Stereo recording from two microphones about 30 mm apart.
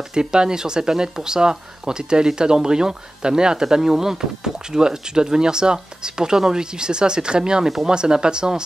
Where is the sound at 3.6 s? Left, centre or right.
Centre.